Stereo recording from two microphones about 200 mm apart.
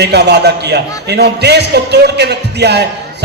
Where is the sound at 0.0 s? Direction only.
55° right (ahead or behind).